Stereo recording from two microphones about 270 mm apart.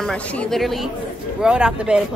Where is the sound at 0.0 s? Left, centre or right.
Centre.